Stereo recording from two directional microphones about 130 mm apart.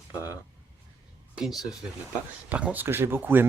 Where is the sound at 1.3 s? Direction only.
5° right (ahead or behind).